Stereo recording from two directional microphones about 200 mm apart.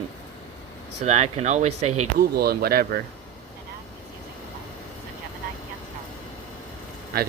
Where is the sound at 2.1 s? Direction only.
50° right (ahead or behind).